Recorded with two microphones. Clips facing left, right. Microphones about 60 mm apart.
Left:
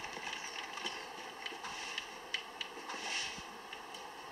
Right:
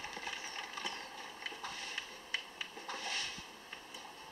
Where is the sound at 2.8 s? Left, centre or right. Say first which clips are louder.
Right 1 dB; left.